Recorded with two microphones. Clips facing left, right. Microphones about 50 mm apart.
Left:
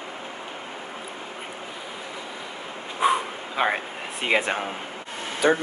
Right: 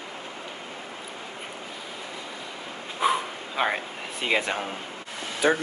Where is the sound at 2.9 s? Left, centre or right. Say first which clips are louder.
Left 2 dB; centre.